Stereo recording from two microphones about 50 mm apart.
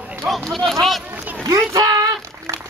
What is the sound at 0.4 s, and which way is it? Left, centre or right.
Speech, centre.